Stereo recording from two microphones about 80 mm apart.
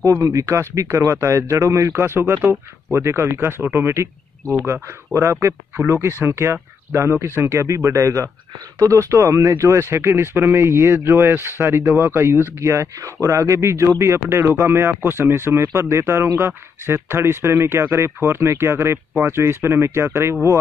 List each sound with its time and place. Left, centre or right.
0.0 s speech: right